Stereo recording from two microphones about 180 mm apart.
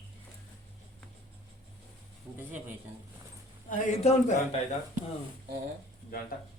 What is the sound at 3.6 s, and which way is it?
Speech, 40° left (ahead or behind).